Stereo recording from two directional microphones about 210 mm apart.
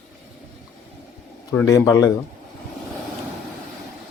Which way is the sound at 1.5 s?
15° left (ahead or behind).